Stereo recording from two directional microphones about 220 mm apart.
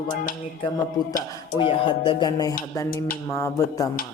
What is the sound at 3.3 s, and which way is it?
Mantra, 15° left (ahead or behind).